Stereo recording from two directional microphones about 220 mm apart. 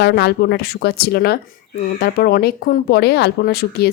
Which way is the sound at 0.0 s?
50° left (ahead or behind).